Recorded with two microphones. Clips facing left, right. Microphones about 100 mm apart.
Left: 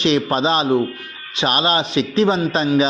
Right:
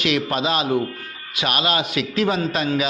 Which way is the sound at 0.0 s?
30° left (ahead or behind).